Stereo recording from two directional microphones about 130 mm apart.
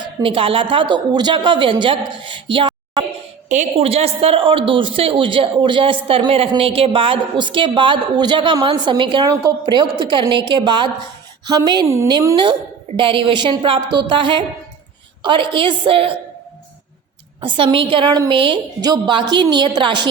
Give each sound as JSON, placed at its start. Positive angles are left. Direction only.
{"t": 0.0, "sound": "a woman's voice", "side_deg": -40}
{"t": 3.5, "sound": "a woman's voice", "side_deg": -55}
{"t": 13.0, "sound": "a woman's voice", "side_deg": -40}
{"t": 17.4, "sound": "a woman's voice", "side_deg": -40}